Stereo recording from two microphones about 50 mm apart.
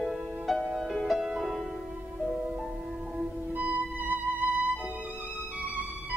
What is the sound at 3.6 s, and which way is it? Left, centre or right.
Music, right.